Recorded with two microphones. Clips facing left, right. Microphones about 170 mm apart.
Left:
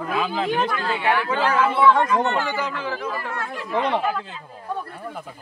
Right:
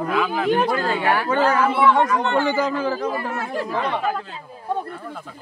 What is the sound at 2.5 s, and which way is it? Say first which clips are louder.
Speech: right 6 dB; 40° right (ahead or behind).